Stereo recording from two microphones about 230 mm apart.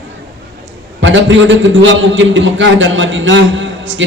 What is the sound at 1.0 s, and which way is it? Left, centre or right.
A man's voice, right.